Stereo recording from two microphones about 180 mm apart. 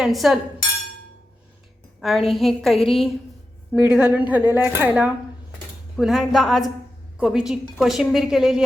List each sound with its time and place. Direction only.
0.0 s a woman's voice: centre (ahead or behind)
2.0 s a woman's voice: centre (ahead or behind)
2.7 s a woman's voice: 30° left (ahead or behind)
3.8 s a woman's voice: 5° right (ahead or behind)